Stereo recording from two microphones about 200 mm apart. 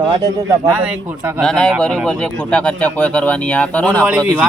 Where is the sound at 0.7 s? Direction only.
5° right (ahead or behind).